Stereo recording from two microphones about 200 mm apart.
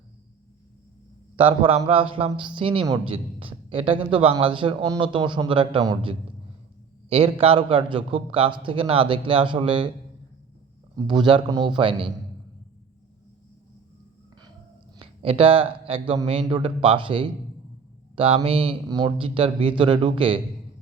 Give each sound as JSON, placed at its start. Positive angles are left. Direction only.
{"t": 1.4, "sound": "a man's voice", "side_deg": -25}
{"t": 10.9, "sound": "a man's voice", "side_deg": -20}
{"t": 14.9, "sound": "a sound", "side_deg": -25}
{"t": 15.9, "sound": "a man's voice", "side_deg": -25}